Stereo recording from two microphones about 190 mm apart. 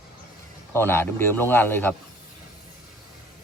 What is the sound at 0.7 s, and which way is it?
A man's voice, 10° left (ahead or behind).